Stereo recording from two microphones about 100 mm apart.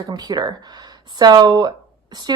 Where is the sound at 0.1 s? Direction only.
40° right (ahead or behind).